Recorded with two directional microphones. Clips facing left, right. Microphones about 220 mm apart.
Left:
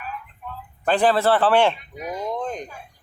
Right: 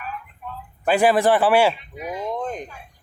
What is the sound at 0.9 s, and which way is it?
Speech, 10° right (ahead or behind).